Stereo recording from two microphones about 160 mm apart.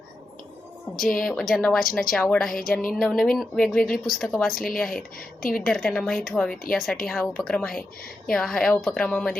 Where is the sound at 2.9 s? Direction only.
Centre (ahead or behind).